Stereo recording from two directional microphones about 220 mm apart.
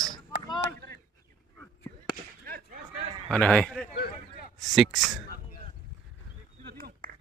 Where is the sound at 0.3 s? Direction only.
50° left (ahead or behind).